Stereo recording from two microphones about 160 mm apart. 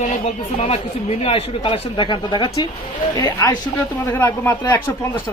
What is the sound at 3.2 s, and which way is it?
Speech, 20° left (ahead or behind).